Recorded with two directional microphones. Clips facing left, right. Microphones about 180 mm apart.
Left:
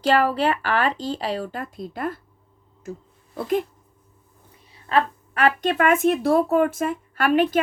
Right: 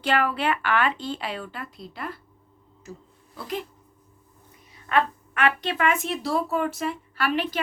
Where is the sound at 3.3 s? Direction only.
50° left (ahead or behind).